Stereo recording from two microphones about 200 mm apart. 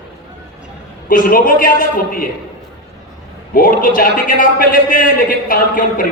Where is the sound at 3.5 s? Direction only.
45° left (ahead or behind).